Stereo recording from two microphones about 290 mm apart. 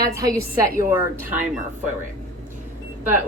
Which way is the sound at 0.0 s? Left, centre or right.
Centre.